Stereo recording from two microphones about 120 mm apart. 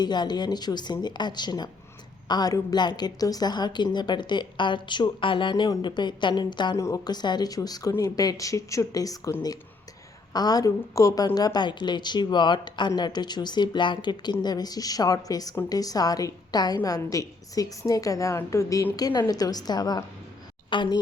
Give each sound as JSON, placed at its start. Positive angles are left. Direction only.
{"t": 0.0, "sound": "speech", "side_deg": 35}
{"t": 6.7, "sound": "speech", "side_deg": 25}
{"t": 10.3, "sound": "a woman's voice", "side_deg": 35}